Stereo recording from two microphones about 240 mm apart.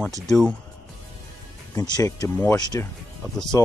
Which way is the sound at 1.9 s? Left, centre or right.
Centre.